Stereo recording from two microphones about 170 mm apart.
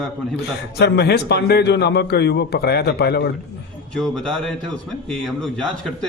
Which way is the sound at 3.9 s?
5° left (ahead or behind).